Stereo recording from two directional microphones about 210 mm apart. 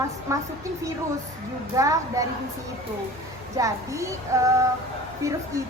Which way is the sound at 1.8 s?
15° right (ahead or behind).